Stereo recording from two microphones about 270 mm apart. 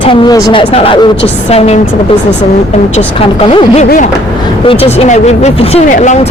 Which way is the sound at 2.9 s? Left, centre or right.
Left.